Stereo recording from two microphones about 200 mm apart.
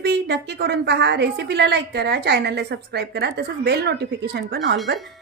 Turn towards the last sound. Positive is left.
turn(degrees=-60)  # may be behind; listen again after turning